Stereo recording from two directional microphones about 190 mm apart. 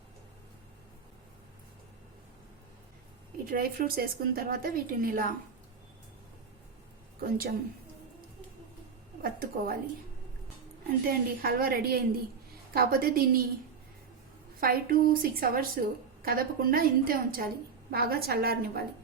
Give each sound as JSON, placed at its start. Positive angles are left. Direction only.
{"t": 3.4, "sound": "a woman's voice", "side_deg": -50}
{"t": 7.2, "sound": "a woman's voice", "side_deg": -50}
{"t": 9.2, "sound": "a woman's voice", "side_deg": -50}
{"t": 11.0, "sound": "a woman's voice", "side_deg": -50}
{"t": 14.6, "sound": "a woman's voice", "side_deg": -50}